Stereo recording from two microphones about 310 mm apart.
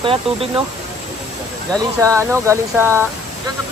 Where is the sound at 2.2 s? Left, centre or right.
Centre.